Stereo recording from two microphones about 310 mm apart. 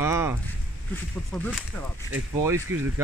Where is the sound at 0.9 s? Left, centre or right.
Centre.